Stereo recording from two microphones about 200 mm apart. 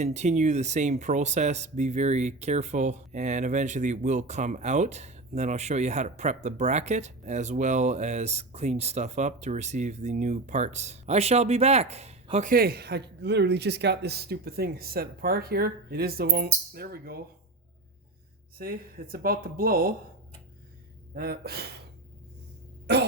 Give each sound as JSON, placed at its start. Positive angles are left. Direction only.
{"t": 0.0, "sound": "speech", "side_deg": -35}
{"t": 18.5, "sound": "speech", "side_deg": -50}
{"t": 21.2, "sound": "speech", "side_deg": -50}